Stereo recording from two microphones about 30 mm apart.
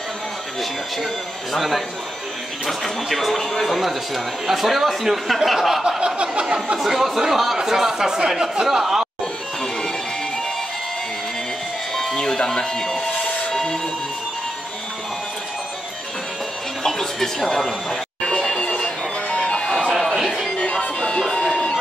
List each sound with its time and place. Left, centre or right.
2.6 s speech: centre
5.9 s a sound: right
6.8 s speech: centre
11.9 s music: centre
12.2 s music: left
13.5 s music: centre
16.8 s music: centre
18.5 s music: left